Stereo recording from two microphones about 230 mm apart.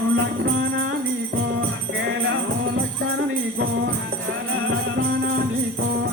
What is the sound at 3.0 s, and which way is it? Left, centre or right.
Music, right.